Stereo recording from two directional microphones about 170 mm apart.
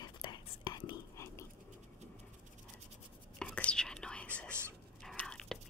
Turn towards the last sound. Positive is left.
turn(degrees=5)  # may be behind; listen again after turning